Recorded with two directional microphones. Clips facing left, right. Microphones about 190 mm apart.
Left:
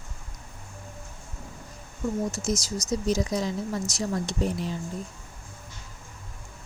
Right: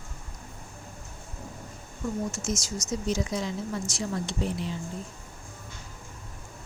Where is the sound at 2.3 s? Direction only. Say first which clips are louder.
Left 3 dB; 35° left (ahead or behind).